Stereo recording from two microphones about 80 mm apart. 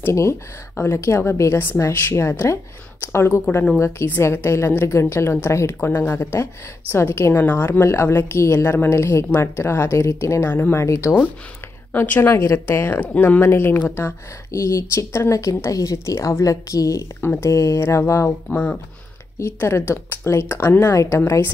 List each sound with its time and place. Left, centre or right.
0.0 s speech: left
14.5 s speech: left
17.2 s speech: left
18.5 s speech: left
19.3 s speech: left